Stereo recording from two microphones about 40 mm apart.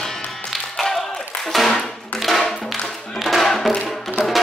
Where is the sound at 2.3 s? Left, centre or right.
Centre.